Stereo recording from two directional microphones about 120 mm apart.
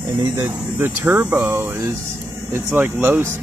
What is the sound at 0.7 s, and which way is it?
Speech, 15° right (ahead or behind).